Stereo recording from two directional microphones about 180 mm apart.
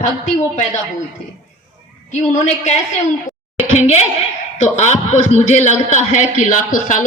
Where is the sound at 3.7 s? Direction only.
40° left (ahead or behind).